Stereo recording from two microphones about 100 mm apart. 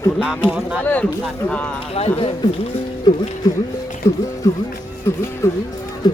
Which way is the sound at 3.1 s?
40° left (ahead or behind).